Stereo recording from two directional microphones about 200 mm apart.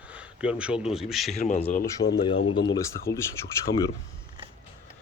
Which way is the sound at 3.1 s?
60° left (ahead or behind).